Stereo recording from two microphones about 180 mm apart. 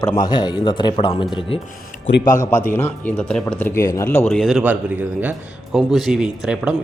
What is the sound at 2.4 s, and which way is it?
A man's voice, 15° left (ahead or behind).